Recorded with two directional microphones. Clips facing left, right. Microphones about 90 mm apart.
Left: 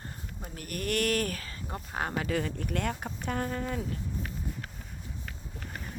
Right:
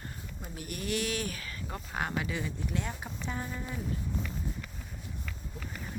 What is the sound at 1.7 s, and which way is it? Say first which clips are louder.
Speech: left 1 dB; 30° left (ahead or behind).